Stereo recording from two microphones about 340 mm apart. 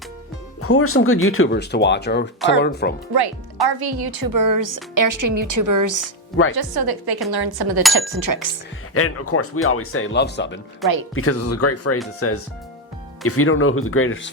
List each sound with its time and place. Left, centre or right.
0.6 s speech: left
3.1 s a woman's voice: right
6.5 s a woman's voice: right
9.0 s speech: left